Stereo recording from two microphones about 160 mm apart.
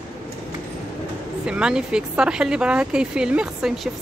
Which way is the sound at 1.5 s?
5° right (ahead or behind).